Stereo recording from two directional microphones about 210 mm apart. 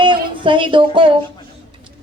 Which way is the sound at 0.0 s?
25° right (ahead or behind).